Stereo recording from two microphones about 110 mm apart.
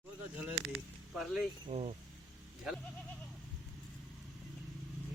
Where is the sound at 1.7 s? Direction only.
55° right (ahead or behind).